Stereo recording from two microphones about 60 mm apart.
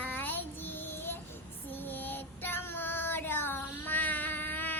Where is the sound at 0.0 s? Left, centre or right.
Left.